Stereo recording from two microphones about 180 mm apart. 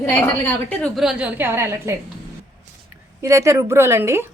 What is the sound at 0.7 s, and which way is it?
A woman's voice, centre (ahead or behind).